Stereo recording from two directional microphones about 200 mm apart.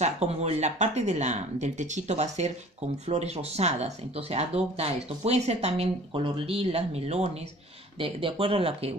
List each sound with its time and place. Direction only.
0.0 s speech: 35° right (ahead or behind)